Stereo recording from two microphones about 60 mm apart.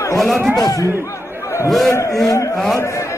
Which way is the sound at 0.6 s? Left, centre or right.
Left.